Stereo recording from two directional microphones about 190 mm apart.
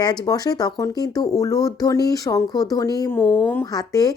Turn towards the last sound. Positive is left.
turn(degrees=20)  # may be behind; listen again after turning